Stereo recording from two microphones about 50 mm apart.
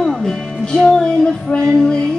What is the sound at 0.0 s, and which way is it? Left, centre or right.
Music, centre.